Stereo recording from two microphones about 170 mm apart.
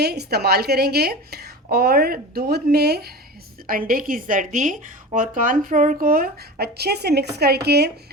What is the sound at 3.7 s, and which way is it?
A woman's voice, 55° right (ahead or behind).